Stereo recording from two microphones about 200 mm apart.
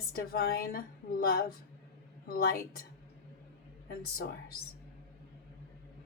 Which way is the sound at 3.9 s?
50° left (ahead or behind).